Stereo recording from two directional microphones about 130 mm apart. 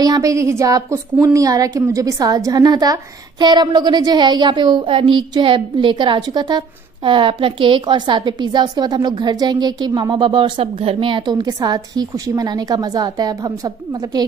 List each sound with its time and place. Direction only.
0.0 s a woman's voice: 30° right (ahead or behind)